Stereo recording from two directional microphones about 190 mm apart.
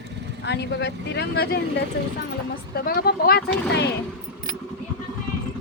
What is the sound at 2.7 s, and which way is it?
Speech, 55° left (ahead or behind).